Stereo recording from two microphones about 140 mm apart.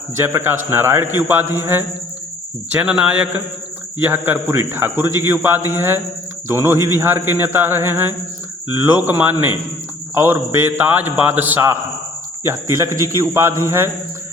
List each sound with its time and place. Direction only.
0.7 s a man's voice: 15° right (ahead or behind)